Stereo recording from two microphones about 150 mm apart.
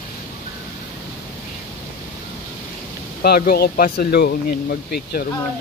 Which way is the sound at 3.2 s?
90° left.